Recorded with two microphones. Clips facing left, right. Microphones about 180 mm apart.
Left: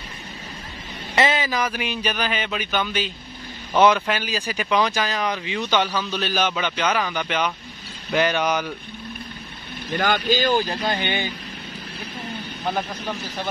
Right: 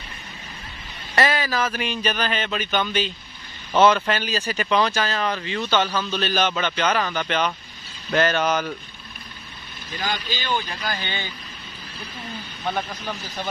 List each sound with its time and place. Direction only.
1.1 s speech: 20° left (ahead or behind)
9.8 s speech: 65° left (ahead or behind); by 11.0 s 30° left (ahead or behind)
11.1 s speech: 15° left (ahead or behind)
12.6 s speech: 5° left (ahead or behind)